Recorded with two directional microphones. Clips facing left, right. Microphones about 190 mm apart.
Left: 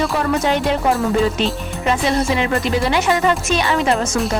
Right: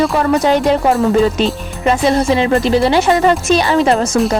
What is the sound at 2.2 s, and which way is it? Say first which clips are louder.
A woman's voice: right 5 dB; 30° right (ahead or behind).